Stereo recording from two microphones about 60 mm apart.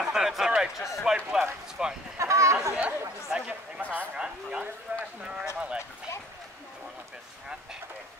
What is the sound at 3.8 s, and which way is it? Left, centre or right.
Speech, right.